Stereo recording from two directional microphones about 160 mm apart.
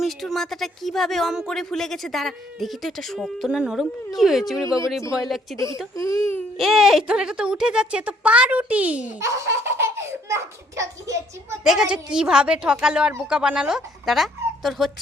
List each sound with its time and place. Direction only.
0.0 s speech: centre (ahead or behind)
5.5 s speech: 20° left (ahead or behind)
6.6 s speech: centre (ahead or behind)
9.2 s laughter: 15° right (ahead or behind)
10.0 s a child's voice: 15° right (ahead or behind)
11.6 s speech: centre (ahead or behind)